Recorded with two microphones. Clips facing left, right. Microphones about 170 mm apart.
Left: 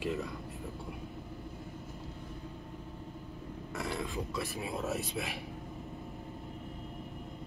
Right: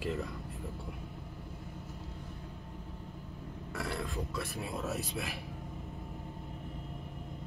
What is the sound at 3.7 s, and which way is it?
Speech, centre (ahead or behind).